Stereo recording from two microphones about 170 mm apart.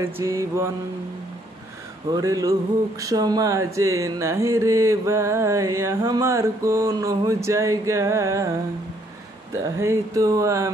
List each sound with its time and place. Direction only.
0.0 s music: 15° right (ahead or behind)
2.0 s a sound: 20° right (ahead or behind)
3.0 s music: 20° right (ahead or behind)